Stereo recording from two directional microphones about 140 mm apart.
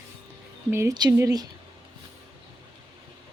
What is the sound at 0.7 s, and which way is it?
Speech, 20° right (ahead or behind).